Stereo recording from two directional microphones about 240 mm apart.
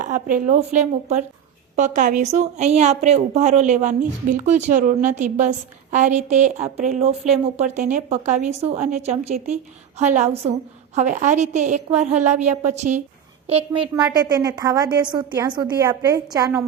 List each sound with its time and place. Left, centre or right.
0.0 s a woman's voice: right
1.7 s a woman's voice: right; by 16.6 s centre